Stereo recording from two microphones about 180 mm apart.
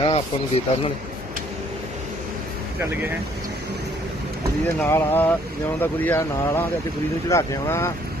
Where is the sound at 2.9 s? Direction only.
10° right (ahead or behind).